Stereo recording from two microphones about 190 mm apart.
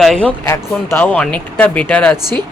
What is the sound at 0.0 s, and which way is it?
Speech, 5° left (ahead or behind).